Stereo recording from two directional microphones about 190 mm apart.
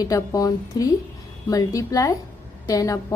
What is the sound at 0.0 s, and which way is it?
A woman's voice, 20° left (ahead or behind).